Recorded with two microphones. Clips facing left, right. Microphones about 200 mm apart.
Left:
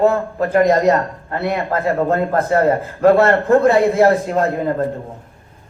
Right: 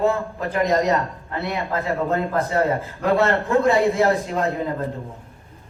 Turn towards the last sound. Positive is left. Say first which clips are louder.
# left 5 dB
turn(degrees=55)  # may be behind; listen again after turning